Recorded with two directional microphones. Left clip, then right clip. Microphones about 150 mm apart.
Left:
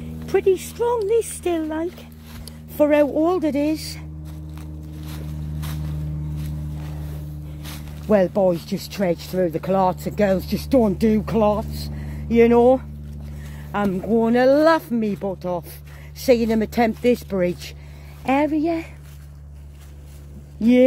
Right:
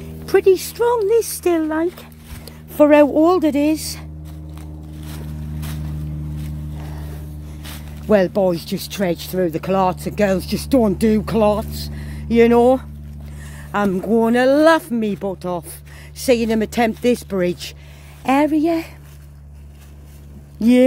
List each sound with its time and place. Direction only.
0.3 s speech: 40° right (ahead or behind)
7.6 s speech: 15° right (ahead or behind)
18.2 s speech: 30° right (ahead or behind)
20.5 s speech: 30° right (ahead or behind)